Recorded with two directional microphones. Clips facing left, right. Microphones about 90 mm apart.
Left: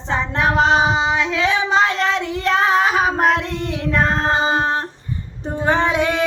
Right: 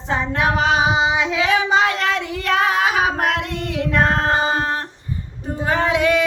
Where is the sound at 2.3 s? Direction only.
25° left (ahead or behind).